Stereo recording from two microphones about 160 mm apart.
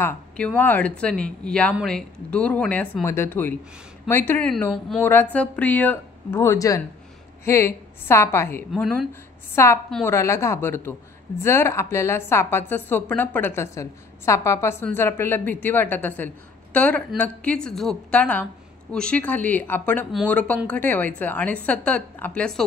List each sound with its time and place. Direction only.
0.0 s a woman's voice: 10° left (ahead or behind)